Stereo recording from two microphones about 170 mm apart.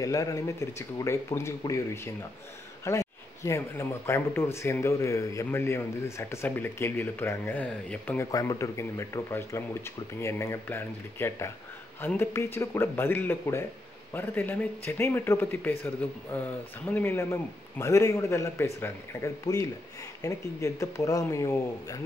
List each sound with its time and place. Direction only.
0.0 s a man's voice: 20° left (ahead or behind)
8.3 s a man's voice: 20° left (ahead or behind)